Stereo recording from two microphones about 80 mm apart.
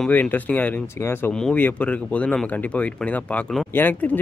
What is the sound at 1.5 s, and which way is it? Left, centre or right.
Speech, centre.